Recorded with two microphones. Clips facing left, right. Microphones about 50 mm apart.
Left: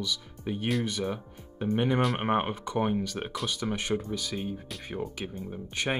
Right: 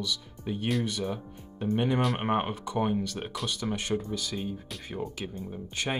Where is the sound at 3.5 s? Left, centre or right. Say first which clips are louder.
Even; centre.